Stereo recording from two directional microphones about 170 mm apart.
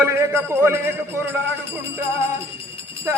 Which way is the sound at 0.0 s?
15° right (ahead or behind).